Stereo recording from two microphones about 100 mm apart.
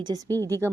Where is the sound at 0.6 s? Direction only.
25° right (ahead or behind).